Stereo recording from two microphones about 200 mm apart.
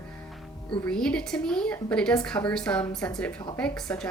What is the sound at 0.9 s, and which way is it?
A woman's voice, 5° left (ahead or behind).